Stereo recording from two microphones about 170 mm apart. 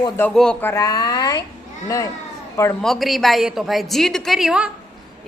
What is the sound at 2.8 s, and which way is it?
A man's voice, centre (ahead or behind).